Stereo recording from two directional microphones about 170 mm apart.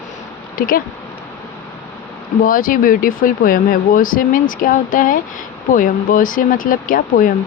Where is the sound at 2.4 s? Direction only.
55° left (ahead or behind).